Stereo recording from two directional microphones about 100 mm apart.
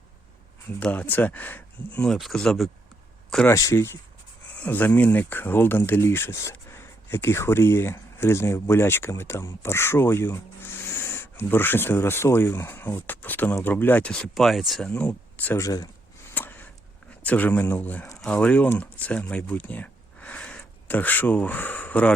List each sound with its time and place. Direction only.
0.8 s speech: 15° left (ahead or behind)
2.1 s speech: centre (ahead or behind)
3.5 s speech: 30° left (ahead or behind)
4.5 s speech: 15° left (ahead or behind)
14.1 s speech: 5° left (ahead or behind)
14.8 s speech: 15° left (ahead or behind)
15.5 s speech: 35° left (ahead or behind)
16.3 s a sound: 20° left (ahead or behind)
17.2 s speech: 15° left (ahead or behind)